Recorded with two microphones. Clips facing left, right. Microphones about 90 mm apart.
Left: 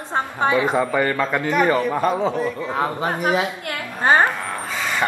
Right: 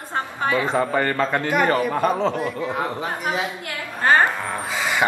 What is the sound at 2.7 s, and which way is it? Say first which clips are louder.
Speech: left 3 dB; 60° left (ahead or behind).